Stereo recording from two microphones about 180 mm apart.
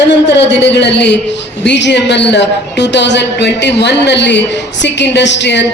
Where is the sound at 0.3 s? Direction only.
70° left (ahead or behind).